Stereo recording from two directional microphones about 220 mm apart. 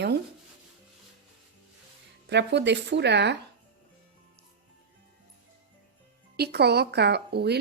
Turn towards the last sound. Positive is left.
turn(degrees=-50)  # may be behind; listen again after turning